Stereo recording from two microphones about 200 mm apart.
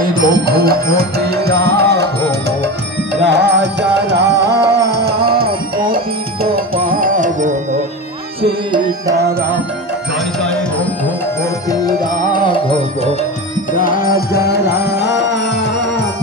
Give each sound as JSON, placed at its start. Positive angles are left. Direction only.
{"t": 0.0, "sound": "music", "side_deg": -45}
{"t": 3.2, "sound": "music", "side_deg": -60}
{"t": 11.7, "sound": "music", "side_deg": 20}
{"t": 13.7, "sound": "music", "side_deg": 45}